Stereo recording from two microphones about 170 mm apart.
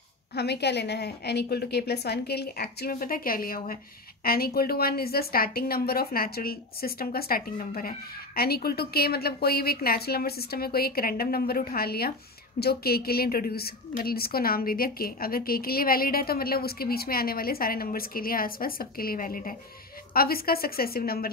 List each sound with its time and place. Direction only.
0.4 s a woman's voice: 75° left (ahead or behind); by 21.3 s 60° left (ahead or behind)